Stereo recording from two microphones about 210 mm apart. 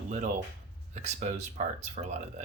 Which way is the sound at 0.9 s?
35° right (ahead or behind).